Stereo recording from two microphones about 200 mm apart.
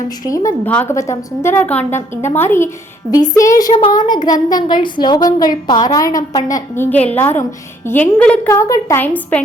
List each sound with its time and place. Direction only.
0.3 s a woman's voice: 10° left (ahead or behind)